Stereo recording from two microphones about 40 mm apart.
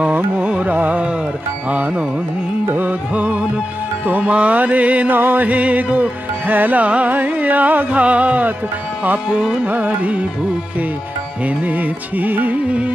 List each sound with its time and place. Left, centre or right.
0.1 s carnatic music: right
0.7 s music: right
1.7 s music: right
2.7 s carnatic music: right
4.0 s speech: right
4.3 s music: right
5.1 s music: right
5.5 s music: right
6.8 s music: right
9.3 s music: centre
9.7 s music: right
11.4 s music: right